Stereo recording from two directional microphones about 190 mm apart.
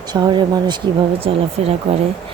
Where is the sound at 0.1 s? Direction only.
20° right (ahead or behind).